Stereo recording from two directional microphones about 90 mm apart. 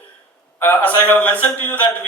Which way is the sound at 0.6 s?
20° left (ahead or behind).